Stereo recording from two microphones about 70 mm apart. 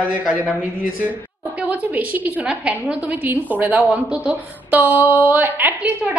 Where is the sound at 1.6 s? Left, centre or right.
Right.